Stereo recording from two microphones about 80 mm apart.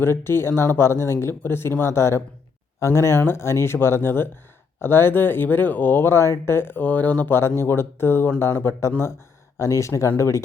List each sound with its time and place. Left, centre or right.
0.0 s speech: left